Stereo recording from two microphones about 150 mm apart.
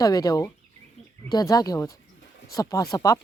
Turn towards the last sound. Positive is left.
turn(degrees=25)  # may be behind; listen again after turning